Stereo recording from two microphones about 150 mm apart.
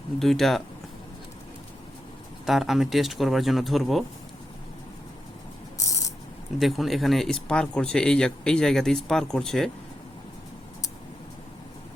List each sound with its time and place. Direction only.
0.2 s speech: centre (ahead or behind)
2.5 s speech: centre (ahead or behind)
5.7 s a sound: 20° left (ahead or behind)
6.6 s speech: centre (ahead or behind)